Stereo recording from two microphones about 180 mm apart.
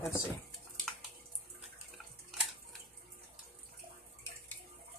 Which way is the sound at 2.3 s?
Centre (ahead or behind).